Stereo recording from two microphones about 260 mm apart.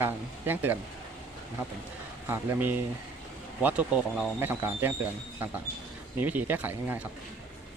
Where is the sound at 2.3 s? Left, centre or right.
Centre.